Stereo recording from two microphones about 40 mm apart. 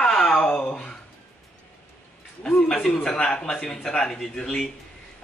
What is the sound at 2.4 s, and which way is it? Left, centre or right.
Speech, centre.